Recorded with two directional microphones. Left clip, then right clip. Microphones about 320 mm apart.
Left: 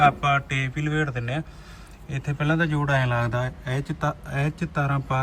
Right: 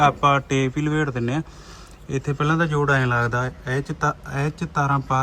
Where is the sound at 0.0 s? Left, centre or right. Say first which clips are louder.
Right 2 dB; centre.